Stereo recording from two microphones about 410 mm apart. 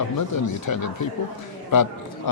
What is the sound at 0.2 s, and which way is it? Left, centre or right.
A man's voice, left.